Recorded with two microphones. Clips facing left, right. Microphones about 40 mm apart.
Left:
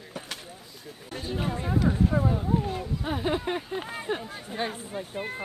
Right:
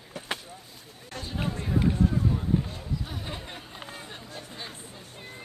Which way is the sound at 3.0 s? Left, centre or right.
Left.